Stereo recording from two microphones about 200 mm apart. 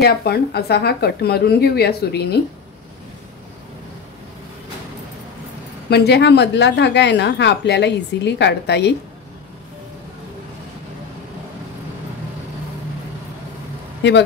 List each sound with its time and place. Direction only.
0.0 s speech: 55° left (ahead or behind)
5.9 s a woman's voice: 55° left (ahead or behind)